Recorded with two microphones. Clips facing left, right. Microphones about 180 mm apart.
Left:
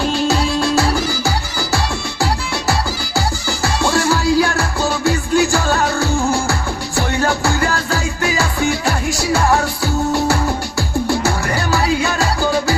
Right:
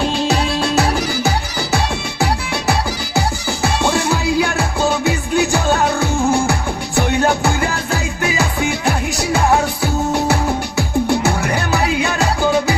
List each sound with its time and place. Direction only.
0.8 s music: 20° right (ahead or behind)
3.2 s music: 20° right (ahead or behind)
9.3 s music: 20° right (ahead or behind)